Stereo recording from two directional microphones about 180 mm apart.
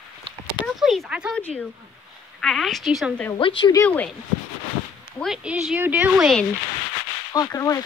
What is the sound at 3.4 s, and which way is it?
Speech, 30° left (ahead or behind).